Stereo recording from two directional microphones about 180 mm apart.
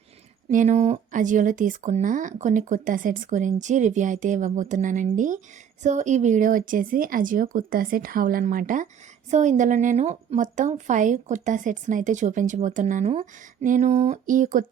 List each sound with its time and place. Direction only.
0.5 s a woman's voice: 45° right (ahead or behind)